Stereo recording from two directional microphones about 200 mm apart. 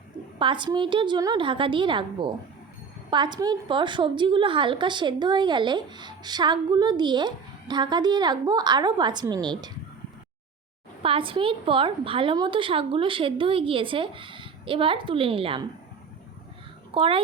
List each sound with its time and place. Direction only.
0.3 s a woman's voice: 25° right (ahead or behind)
11.0 s a woman's voice: 25° right (ahead or behind)
16.9 s a woman's voice: 25° right (ahead or behind)